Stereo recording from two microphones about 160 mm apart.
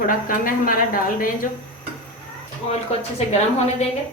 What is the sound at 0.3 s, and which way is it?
Speech, 60° left (ahead or behind).